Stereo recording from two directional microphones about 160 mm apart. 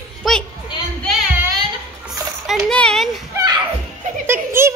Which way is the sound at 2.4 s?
Centre (ahead or behind).